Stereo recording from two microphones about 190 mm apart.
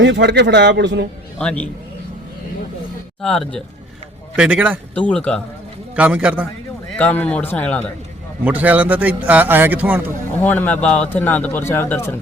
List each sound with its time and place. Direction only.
0.0 s speech: 65° right (ahead or behind)
1.4 s speech: 5° left (ahead or behind)
3.2 s a man's voice: 5° left (ahead or behind)
4.9 s speech: 5° left (ahead or behind)
6.0 s a man's voice: 5° right (ahead or behind)
7.0 s speech: 5° left (ahead or behind)
8.4 s a man's voice: 10° right (ahead or behind)
10.4 s speech: 10° left (ahead or behind)